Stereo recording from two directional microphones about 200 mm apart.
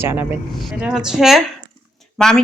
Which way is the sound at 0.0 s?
10° right (ahead or behind).